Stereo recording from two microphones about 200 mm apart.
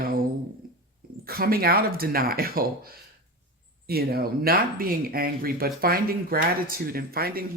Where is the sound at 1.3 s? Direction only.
50° right (ahead or behind).